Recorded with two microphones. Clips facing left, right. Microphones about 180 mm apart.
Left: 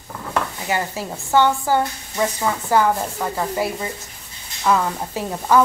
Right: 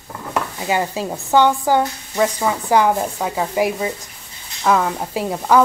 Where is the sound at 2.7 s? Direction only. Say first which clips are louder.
Right 2 dB; 15° right (ahead or behind).